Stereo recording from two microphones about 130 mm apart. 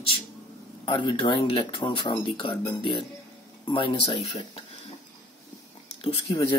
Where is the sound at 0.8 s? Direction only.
40° left (ahead or behind).